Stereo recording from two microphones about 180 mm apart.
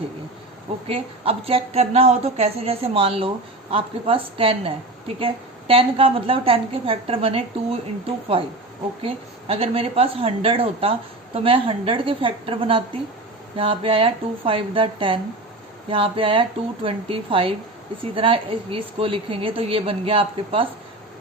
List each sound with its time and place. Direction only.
0.9 s a woman's voice: 30° right (ahead or behind)